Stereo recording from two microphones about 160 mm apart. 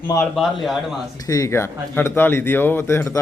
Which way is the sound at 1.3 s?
20° left (ahead or behind).